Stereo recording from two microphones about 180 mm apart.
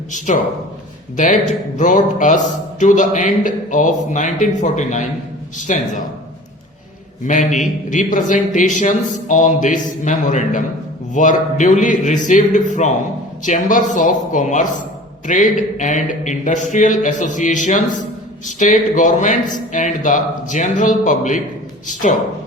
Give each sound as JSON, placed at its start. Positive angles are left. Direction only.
{"t": 1.1, "sound": "a man's voice", "side_deg": 45}
{"t": 7.3, "sound": "a man's voice", "side_deg": 45}